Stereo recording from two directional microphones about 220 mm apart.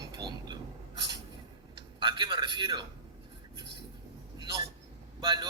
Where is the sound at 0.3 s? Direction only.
20° right (ahead or behind).